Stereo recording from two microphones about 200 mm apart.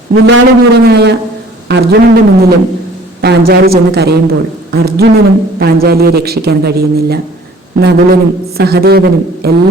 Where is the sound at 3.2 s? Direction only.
55° right (ahead or behind).